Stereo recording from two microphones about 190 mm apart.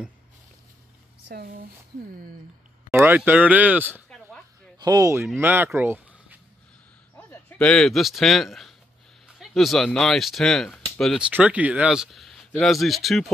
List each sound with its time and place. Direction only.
1.3 s speech: 50° right (ahead or behind)
2.9 s speech: 10° right (ahead or behind)
4.7 s speech: 20° right (ahead or behind)
7.2 s a man's voice: 10° left (ahead or behind)